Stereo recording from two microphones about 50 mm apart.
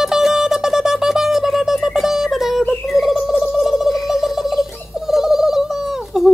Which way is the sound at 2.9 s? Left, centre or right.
Centre.